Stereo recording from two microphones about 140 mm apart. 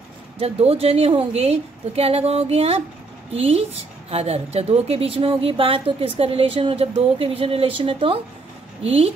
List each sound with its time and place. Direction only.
0.4 s a woman's voice: 45° right (ahead or behind)